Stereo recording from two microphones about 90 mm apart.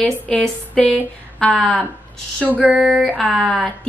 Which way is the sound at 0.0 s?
10° left (ahead or behind).